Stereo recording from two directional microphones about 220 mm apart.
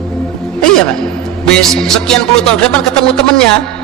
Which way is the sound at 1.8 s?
5° left (ahead or behind).